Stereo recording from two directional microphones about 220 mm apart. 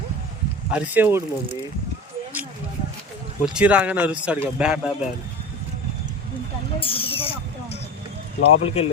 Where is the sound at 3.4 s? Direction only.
5° right (ahead or behind).